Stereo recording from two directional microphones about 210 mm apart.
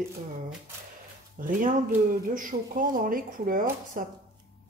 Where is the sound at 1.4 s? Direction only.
40° right (ahead or behind).